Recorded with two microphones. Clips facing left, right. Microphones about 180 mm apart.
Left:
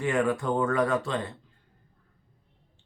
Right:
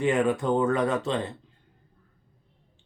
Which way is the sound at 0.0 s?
20° right (ahead or behind).